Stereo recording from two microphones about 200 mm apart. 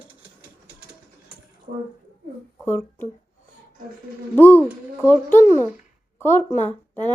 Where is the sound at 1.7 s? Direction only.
55° right (ahead or behind).